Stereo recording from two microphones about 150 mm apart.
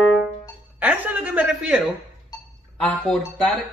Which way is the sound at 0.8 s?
10° right (ahead or behind).